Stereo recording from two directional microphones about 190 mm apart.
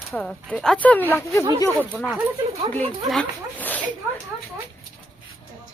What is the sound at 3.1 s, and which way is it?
Zipper, 5° left (ahead or behind).